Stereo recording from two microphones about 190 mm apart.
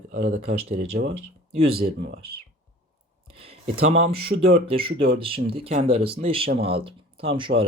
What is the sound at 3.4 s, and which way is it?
Speech, 30° right (ahead or behind).